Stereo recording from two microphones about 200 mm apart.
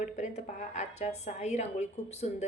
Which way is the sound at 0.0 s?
35° left (ahead or behind).